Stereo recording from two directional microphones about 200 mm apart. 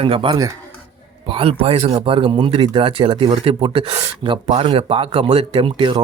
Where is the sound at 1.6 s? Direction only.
30° right (ahead or behind).